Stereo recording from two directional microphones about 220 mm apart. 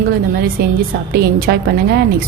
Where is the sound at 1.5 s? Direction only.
45° right (ahead or behind).